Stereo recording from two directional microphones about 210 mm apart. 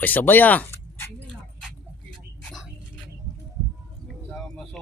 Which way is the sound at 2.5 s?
Centre (ahead or behind).